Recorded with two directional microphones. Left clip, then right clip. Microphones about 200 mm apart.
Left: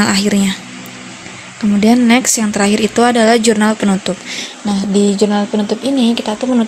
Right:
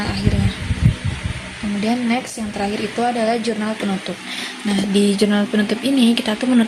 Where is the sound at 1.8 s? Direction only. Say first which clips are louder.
Left 10 dB; 50° left (ahead or behind).